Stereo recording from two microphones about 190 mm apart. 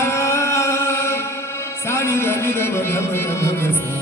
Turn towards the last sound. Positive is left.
turn(degrees=15)  # may be behind; listen again after turning